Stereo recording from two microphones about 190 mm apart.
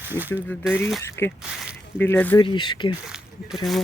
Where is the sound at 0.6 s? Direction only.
5° right (ahead or behind).